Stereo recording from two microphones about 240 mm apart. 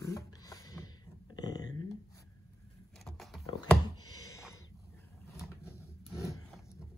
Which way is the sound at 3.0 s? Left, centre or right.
Centre.